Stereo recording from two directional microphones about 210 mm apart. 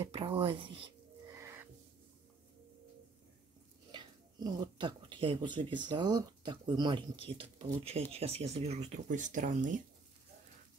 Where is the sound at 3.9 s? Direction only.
20° right (ahead or behind); by 9.8 s 35° right (ahead or behind).